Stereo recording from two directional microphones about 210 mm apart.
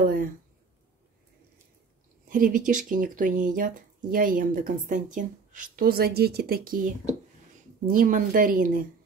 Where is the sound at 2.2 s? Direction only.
40° right (ahead or behind).